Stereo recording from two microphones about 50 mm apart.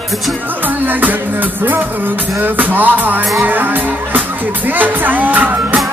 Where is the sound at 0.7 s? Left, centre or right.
Right.